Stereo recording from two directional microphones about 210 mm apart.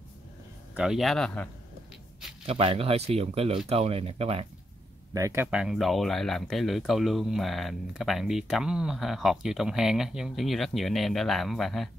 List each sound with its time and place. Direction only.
0.7 s speech: centre (ahead or behind)
2.4 s speech: 25° right (ahead or behind)
5.1 s speech: 15° right (ahead or behind)